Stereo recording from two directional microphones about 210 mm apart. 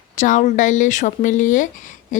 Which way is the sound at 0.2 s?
35° left (ahead or behind).